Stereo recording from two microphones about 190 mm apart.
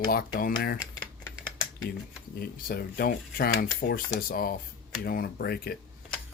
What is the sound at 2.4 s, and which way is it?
Speech, 50° left (ahead or behind).